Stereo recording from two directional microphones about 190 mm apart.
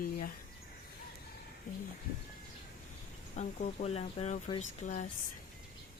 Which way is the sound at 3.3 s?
40° left (ahead or behind).